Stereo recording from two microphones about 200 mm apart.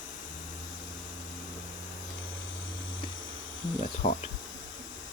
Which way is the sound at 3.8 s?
40° left (ahead or behind).